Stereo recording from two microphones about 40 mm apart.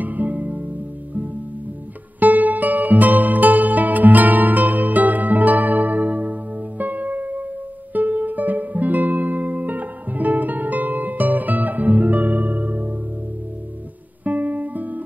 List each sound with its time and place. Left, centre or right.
0.0 s music: right
2.1 s music: right
14.2 s guitar: right